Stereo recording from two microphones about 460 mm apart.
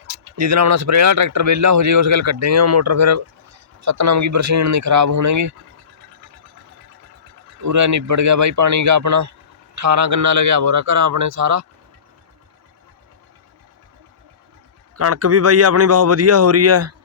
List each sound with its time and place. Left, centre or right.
0.1 s speech: right
7.6 s speech: right
14.9 s speech: right